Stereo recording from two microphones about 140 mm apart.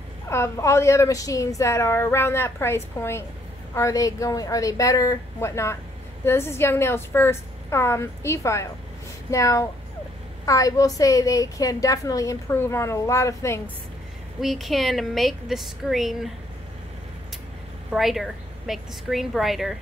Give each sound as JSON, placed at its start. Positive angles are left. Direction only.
{"t": 0.3, "sound": "a woman's voice", "side_deg": 20}
{"t": 14.4, "sound": "a woman's voice", "side_deg": 0}
{"t": 17.9, "sound": "a woman's voice", "side_deg": 0}